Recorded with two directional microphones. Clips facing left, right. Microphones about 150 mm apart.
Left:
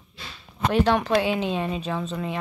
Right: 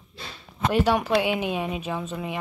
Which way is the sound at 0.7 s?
10° right (ahead or behind).